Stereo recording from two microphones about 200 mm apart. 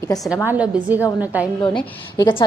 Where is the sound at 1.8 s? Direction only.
20° left (ahead or behind).